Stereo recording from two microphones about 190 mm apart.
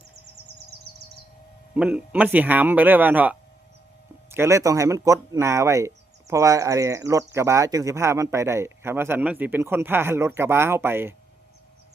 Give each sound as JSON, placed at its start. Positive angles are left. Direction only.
{"t": 1.7, "sound": "speech", "side_deg": -5}